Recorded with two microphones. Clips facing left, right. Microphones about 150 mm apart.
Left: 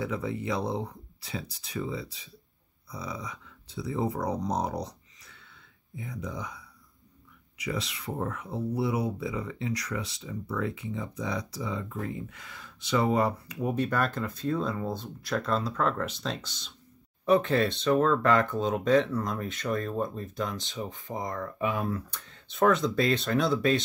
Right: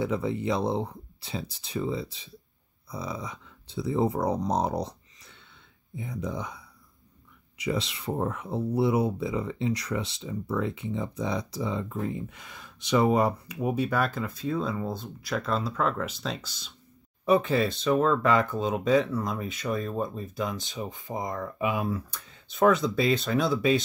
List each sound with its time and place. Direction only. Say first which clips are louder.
0.0 s speech: right 4 dB; 25° right (ahead or behind)
7.5 s speech: right 4 dB; 25° right (ahead or behind); by 23.8 s 5° right (ahead or behind)